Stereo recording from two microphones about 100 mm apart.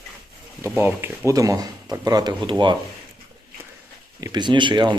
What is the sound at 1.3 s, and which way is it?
Speech, 35° right (ahead or behind).